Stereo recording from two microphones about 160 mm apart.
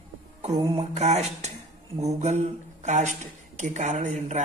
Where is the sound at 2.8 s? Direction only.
50° right (ahead or behind).